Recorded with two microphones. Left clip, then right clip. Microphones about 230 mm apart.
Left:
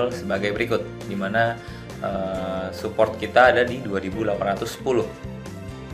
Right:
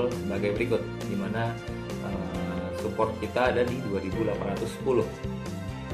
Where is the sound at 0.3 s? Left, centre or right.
Centre.